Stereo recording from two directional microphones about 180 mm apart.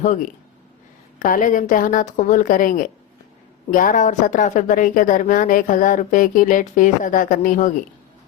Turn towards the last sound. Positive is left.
turn(degrees=45)  # may be behind; listen again after turning